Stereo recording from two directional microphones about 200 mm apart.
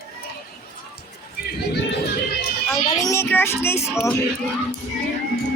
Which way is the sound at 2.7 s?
15° left (ahead or behind).